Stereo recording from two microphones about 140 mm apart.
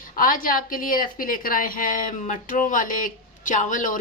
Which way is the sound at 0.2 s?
80° left.